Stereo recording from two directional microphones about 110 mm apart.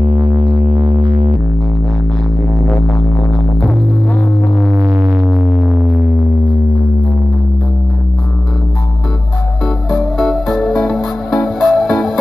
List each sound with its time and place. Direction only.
0.7 s music: 80° right
4.7 s music: 25° right (ahead or behind)
9.8 s music: centre (ahead or behind)